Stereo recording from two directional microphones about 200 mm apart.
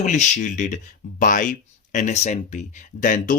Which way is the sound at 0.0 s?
35° left (ahead or behind).